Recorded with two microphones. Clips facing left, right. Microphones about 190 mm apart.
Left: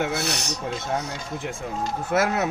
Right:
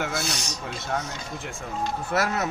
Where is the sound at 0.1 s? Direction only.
65° left (ahead or behind).